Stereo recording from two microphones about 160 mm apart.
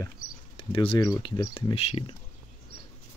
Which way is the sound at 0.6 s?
35° left (ahead or behind).